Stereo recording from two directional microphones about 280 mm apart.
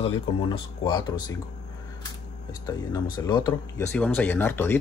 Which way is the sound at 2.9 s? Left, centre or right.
Centre.